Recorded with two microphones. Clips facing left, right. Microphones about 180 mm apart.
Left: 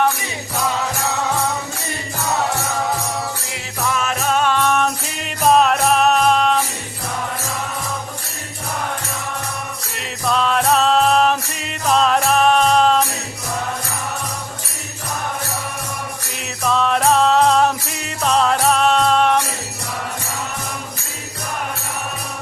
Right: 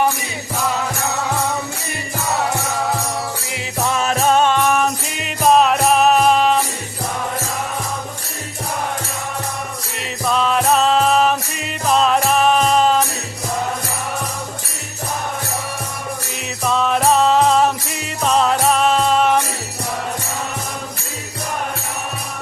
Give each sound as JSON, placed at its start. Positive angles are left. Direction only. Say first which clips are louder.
{"t": 3.5, "sound": "music", "louder": "right 3 dB", "side_deg": -25}
{"t": 4.5, "sound": "music", "louder": "right 1 dB", "side_deg": -10}
{"t": 10.2, "sound": "music", "louder": "right 1 dB", "side_deg": 0}
{"t": 16.6, "sound": "music", "louder": "even", "side_deg": 0}